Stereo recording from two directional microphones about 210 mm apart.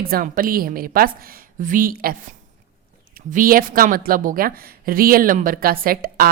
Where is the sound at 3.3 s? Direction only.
40° right (ahead or behind).